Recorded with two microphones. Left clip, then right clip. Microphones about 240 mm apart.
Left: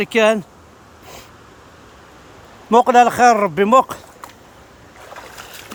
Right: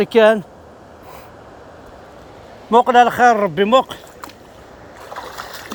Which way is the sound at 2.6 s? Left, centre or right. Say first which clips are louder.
Even; left.